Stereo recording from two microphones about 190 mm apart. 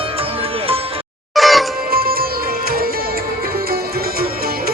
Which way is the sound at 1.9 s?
50° right (ahead or behind).